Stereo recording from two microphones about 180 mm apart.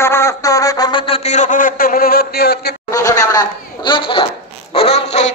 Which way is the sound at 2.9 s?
20° left (ahead or behind).